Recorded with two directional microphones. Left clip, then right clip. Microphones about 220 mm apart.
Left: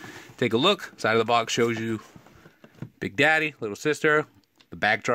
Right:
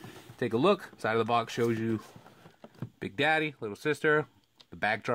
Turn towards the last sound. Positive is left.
turn(degrees=30)  # may be behind; listen again after turning